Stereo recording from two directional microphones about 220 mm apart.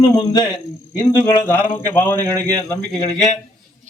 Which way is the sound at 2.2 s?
15° right (ahead or behind).